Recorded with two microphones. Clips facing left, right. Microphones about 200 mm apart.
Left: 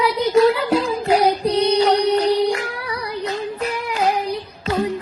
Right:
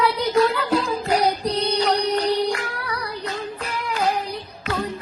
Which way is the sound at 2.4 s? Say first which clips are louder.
Left 4 dB; 25° left (ahead or behind).